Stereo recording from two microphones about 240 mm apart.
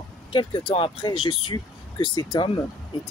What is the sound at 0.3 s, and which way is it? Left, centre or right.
Speech, left.